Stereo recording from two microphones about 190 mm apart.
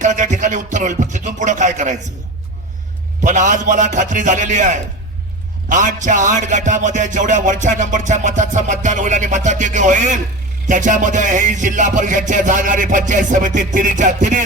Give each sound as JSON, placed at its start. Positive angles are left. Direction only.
{"t": 0.0, "sound": "music", "side_deg": -40}
{"t": 3.2, "sound": "music", "side_deg": -40}